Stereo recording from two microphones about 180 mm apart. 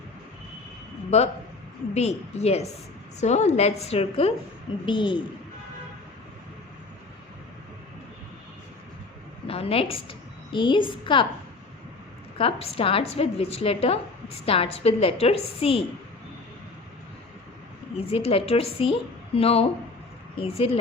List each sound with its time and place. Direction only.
1.1 s a woman's voice: 35° left (ahead or behind)
9.5 s a woman's voice: 30° left (ahead or behind)
12.4 s a woman's voice: 30° left (ahead or behind)
18.1 s a woman's voice: 35° left (ahead or behind)